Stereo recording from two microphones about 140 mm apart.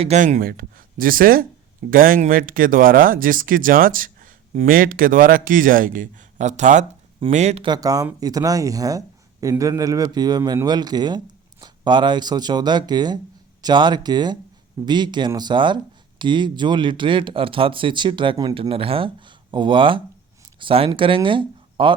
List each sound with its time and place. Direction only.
0.0 s speech: 50° right (ahead or behind)
7.6 s speech: 30° right (ahead or behind)